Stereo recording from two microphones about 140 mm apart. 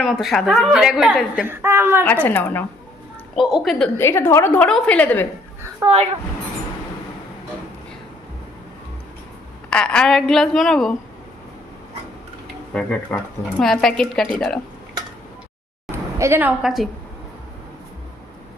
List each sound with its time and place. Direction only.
0.0 s a woman's voice: centre (ahead or behind)
1.5 s a woman's voice: 15° right (ahead or behind)
2.2 s a woman's voice: 10° left (ahead or behind)
3.3 s a woman's voice: centre (ahead or behind)
3.9 s a woman's voice: 15° left (ahead or behind)
5.8 s a woman's voice: 25° right (ahead or behind)
9.6 s a woman's voice: 5° left (ahead or behind)
12.7 s a woman's voice: 10° left (ahead or behind)
16.1 s a woman's voice: 20° right (ahead or behind); by 16.9 s centre (ahead or behind)